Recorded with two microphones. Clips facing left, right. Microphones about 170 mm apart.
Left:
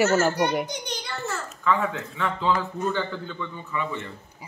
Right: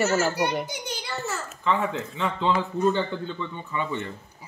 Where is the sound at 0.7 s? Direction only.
5° right (ahead or behind).